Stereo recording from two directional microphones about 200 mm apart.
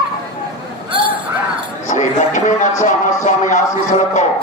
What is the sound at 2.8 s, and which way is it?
Music, 40° left (ahead or behind).